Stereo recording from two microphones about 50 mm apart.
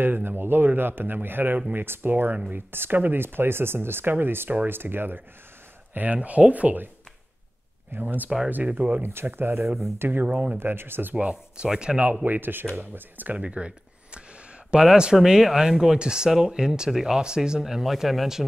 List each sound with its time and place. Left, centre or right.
0.0 s speech: right
6.1 s speech: right
7.9 s speech: right
8.6 s speech: right
9.0 s speech: right
10.2 s speech: right
10.6 s speech: right
11.1 s speech: right
12.0 s speech: right
13.3 s speech: right; by 18.4 s centre